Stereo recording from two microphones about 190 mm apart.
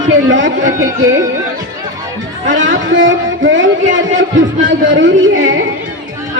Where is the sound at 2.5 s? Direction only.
85° right.